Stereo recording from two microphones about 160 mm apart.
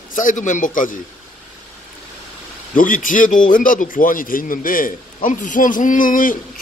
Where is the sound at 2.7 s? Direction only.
55° left (ahead or behind).